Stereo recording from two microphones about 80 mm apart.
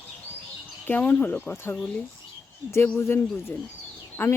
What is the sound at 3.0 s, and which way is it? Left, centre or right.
A man's voice, left.